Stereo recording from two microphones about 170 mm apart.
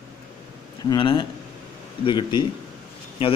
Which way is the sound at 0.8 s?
30° left (ahead or behind).